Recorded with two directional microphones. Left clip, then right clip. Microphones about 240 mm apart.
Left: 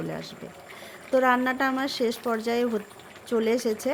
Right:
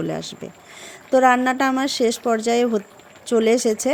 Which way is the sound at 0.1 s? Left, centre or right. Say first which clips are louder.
Right 7 dB; right.